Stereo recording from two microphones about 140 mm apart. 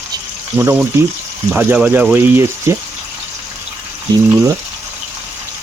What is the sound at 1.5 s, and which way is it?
Speech, 10° right (ahead or behind).